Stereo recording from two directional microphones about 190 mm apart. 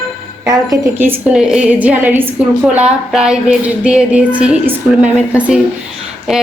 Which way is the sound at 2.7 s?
5° right (ahead or behind).